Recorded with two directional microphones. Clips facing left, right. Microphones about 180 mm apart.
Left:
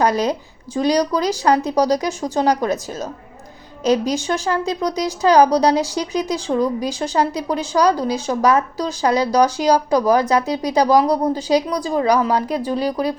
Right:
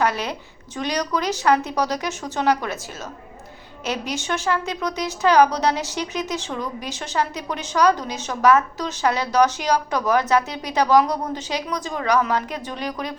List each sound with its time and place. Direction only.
0.0 s a woman's voice: 40° left (ahead or behind)